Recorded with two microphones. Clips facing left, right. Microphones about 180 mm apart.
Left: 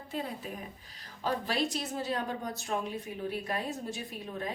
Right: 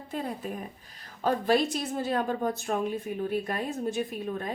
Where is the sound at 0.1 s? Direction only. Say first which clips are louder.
Right 4 dB; 50° right (ahead or behind).